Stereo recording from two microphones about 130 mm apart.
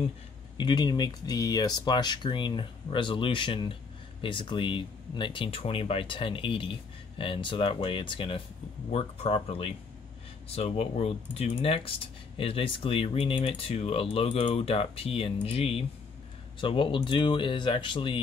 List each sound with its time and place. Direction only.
0.6 s speech: 35° left (ahead or behind)